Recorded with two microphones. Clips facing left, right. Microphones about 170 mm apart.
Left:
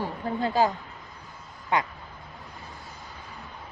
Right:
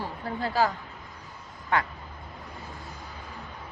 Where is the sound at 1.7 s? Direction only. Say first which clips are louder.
Left 1 dB; 15° left (ahead or behind).